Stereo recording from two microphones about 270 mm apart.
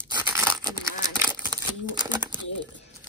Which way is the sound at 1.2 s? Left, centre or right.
Centre.